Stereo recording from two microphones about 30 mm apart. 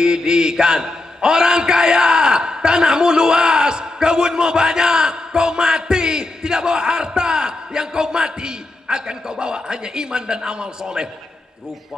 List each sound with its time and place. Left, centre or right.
0.0 s a man's voice: right